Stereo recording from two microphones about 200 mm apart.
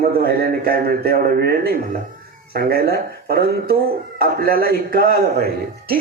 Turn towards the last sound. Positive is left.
turn(degrees=-50)  # may be behind; listen again after turning